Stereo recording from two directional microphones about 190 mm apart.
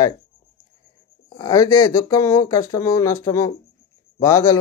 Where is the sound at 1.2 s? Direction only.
25° left (ahead or behind).